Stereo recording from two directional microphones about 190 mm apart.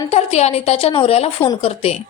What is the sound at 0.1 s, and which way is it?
A woman's voice, 35° left (ahead or behind).